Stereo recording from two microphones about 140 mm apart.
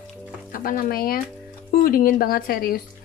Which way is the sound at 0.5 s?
90° left.